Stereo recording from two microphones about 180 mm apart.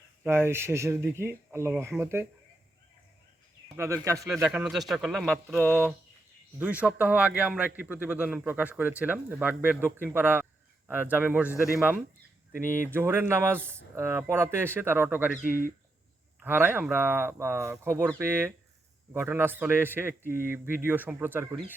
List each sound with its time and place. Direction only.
0.3 s speech: 15° right (ahead or behind)
3.8 s speech: 15° right (ahead or behind)
4.4 s a man's voice: 5° right (ahead or behind)
5.6 s speech: 10° right (ahead or behind)